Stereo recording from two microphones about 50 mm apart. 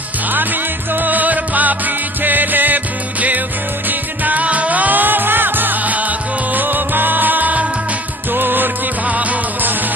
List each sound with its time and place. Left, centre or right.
0.3 s music: right
9.0 s music: right